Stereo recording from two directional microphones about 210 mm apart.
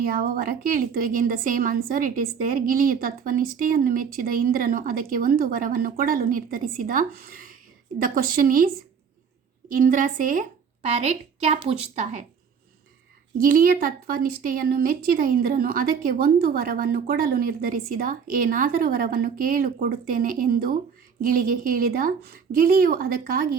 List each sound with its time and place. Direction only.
0.0 s a woman's voice: 45° right (ahead or behind)
13.4 s speech: 40° right (ahead or behind)